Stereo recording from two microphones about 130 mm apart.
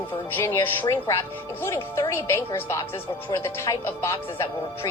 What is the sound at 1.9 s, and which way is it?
Speech, 25° left (ahead or behind).